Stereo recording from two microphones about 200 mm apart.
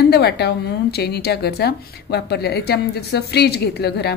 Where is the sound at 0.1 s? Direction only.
55° left (ahead or behind).